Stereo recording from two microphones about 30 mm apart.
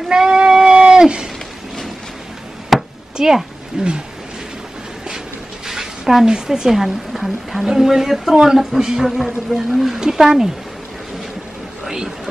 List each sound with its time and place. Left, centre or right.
0.1 s goat: right
2.7 s chop: centre
3.2 s a woman's voice: centre
3.8 s a woman's voice: right
5.7 s a sound: centre
6.2 s a woman's voice: right
6.7 s a woman's voice: centre
7.6 s a woman's voice: centre